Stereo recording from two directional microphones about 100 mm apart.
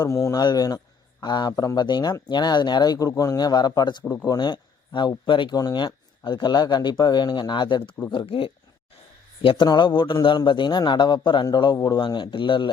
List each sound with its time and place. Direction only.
0.0 s a man's voice: 35° left (ahead or behind); by 9.6 s 60° left (ahead or behind)
9.6 s speech: 50° left (ahead or behind)